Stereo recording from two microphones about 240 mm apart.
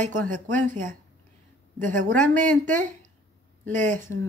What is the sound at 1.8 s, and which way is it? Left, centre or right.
Speech, right.